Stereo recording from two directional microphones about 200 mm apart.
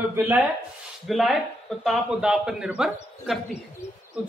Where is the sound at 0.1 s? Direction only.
10° right (ahead or behind).